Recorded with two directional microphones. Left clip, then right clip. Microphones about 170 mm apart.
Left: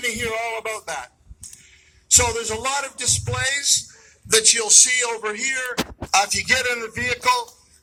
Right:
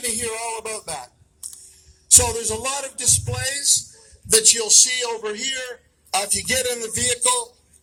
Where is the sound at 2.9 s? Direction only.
10° right (ahead or behind).